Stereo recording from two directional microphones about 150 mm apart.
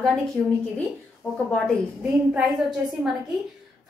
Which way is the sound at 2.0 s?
5° right (ahead or behind).